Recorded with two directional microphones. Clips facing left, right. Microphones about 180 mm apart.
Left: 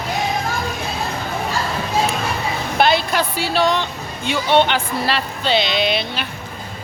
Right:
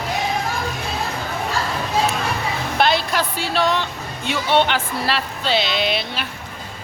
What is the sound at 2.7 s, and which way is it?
Speech, centre (ahead or behind).